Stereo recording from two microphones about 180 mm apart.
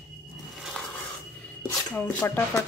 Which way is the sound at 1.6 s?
10° left (ahead or behind).